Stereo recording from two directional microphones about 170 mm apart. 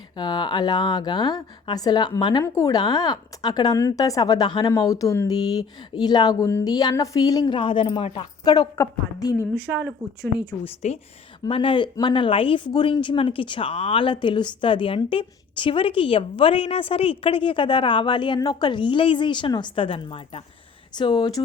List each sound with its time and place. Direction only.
0.2 s a woman's voice: 25° left (ahead or behind)
10.7 s a woman's voice: 40° left (ahead or behind)